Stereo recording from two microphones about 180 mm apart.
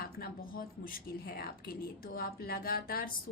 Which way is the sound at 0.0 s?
55° left (ahead or behind).